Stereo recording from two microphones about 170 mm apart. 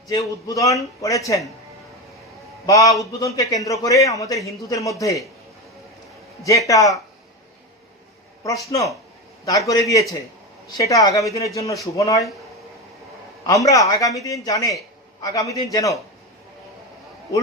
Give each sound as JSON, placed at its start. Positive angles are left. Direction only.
{"t": 0.1, "sound": "a man's voice", "side_deg": 20}
{"t": 2.6, "sound": "a man's voice", "side_deg": 20}
{"t": 6.7, "sound": "a man's voice", "side_deg": 20}
{"t": 9.5, "sound": "a man's voice", "side_deg": 20}
{"t": 13.5, "sound": "a man's voice", "side_deg": 20}